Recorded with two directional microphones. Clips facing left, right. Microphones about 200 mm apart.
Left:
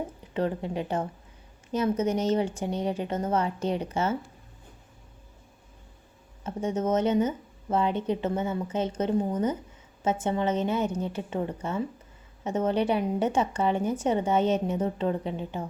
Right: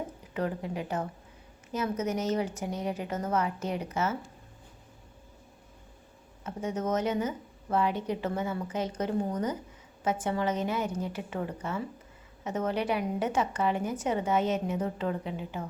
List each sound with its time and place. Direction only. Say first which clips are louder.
0.3 s speech: left 4 dB; 30° left (ahead or behind)
6.4 s speech: left 4 dB; 25° left (ahead or behind)